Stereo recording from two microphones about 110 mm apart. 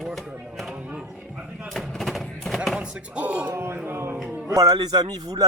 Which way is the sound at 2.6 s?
10° right (ahead or behind).